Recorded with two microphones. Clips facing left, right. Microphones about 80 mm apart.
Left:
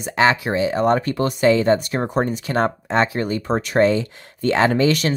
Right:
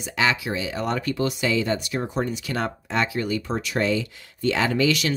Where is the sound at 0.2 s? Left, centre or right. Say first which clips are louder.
Left 7 dB; left.